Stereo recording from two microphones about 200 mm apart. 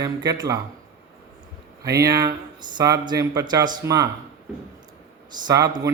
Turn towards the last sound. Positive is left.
turn(degrees=-15)  # may be behind; listen again after turning